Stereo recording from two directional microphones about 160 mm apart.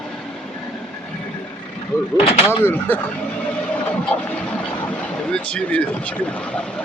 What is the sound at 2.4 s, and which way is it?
Speech, 15° left (ahead or behind).